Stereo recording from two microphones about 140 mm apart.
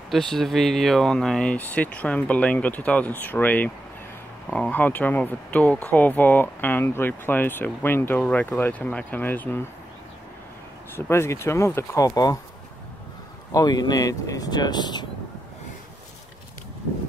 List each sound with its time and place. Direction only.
0.1 s speech: 5° left (ahead or behind)
11.0 s speech: 20° left (ahead or behind)
13.5 s speech: 25° left (ahead or behind)